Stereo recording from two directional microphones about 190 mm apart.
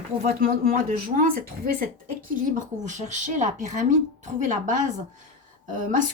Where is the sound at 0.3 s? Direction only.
50° right (ahead or behind).